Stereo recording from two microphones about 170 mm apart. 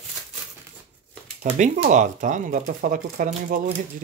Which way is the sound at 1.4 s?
55° right (ahead or behind).